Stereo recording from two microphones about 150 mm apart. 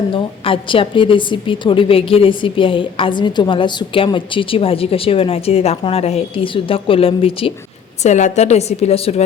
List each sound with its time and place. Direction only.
0.1 s a woman's voice: 35° left (ahead or behind)
8.0 s a woman's voice: 50° left (ahead or behind)